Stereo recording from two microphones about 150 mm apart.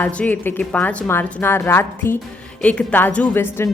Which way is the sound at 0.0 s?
10° left (ahead or behind).